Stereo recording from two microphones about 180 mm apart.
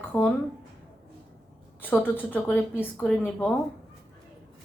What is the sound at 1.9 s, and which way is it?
A woman's voice, 10° left (ahead or behind).